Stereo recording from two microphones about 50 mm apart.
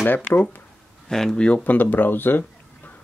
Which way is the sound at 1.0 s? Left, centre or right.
Centre.